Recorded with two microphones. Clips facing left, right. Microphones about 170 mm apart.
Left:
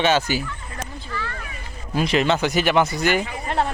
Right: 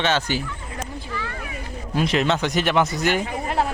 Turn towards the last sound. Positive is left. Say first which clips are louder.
# even
turn(degrees=-5)  # may be behind; listen again after turning